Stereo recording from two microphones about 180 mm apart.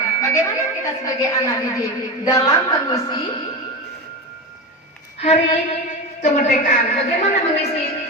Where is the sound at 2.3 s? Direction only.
20° left (ahead or behind).